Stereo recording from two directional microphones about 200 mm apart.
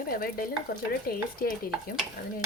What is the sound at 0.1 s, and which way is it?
A woman's voice, 45° left (ahead or behind).